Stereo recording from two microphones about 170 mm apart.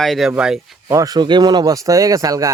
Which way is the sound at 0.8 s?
20° right (ahead or behind).